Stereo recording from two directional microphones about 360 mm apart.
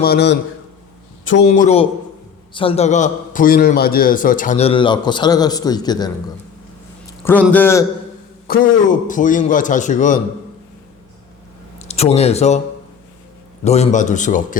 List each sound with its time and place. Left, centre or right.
0.0 s a man's voice: left
1.5 s a man's voice: centre
7.3 s a man's voice: centre
8.4 s a man's voice: left
11.8 s speech: centre
13.7 s a man's voice: centre